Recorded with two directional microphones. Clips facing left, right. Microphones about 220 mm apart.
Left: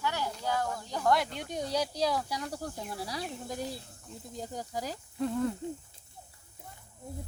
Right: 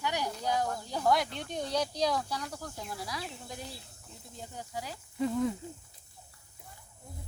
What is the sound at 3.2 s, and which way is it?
Speech, 45° left (ahead or behind).